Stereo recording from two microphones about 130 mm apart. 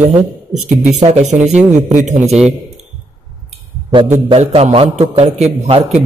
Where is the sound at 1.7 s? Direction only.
65° right (ahead or behind).